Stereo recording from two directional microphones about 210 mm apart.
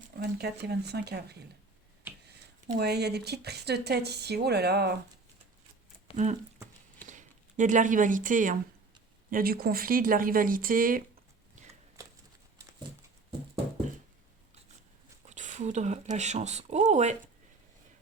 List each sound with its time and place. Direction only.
0.2 s speech: 50° right (ahead or behind)
2.7 s speech: 50° right (ahead or behind)
6.1 s speech: 25° left (ahead or behind)
7.1 s speech: 35° right (ahead or behind)
11.5 s a sound: 35° right (ahead or behind)
12.0 s a sound: 15° right (ahead or behind)
15.3 s speech: 35° right (ahead or behind)